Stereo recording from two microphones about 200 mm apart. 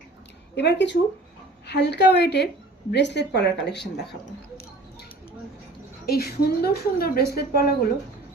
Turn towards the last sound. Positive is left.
turn(degrees=50)  # may be behind; listen again after turning